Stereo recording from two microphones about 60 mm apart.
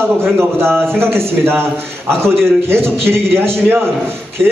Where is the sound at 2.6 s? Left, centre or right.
Right.